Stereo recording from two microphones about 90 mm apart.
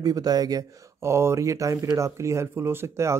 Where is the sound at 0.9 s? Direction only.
30° right (ahead or behind).